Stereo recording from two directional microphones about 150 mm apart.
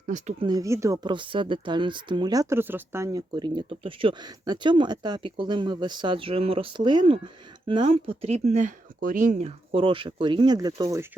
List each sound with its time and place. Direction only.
0.3 s speech: 25° right (ahead or behind); by 9.5 s 60° right (ahead or behind)
9.7 s speech: 35° right (ahead or behind)